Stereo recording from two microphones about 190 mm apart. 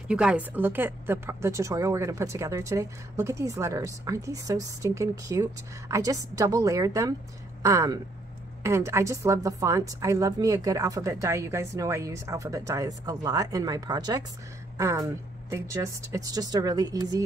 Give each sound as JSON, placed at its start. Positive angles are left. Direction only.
{"t": 0.1, "sound": "a woman's voice", "side_deg": -5}